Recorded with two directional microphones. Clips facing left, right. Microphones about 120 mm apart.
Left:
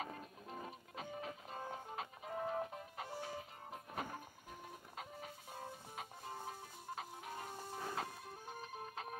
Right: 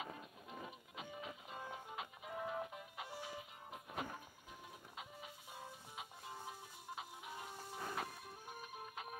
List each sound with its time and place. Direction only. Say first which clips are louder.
0.0 s music: left 2 dB; 40° left (ahead or behind)